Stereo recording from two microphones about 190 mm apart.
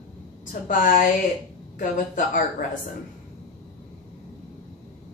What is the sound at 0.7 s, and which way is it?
Speech, 45° left (ahead or behind).